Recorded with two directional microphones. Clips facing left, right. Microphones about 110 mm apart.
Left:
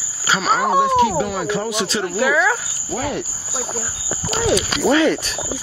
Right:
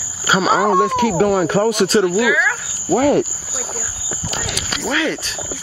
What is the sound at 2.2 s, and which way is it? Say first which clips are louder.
Speech: even; 35° left (ahead or behind).